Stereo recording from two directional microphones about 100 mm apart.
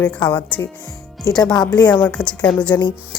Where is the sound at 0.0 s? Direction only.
15° left (ahead or behind).